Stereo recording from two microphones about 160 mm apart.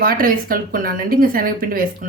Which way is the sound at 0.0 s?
65° right (ahead or behind).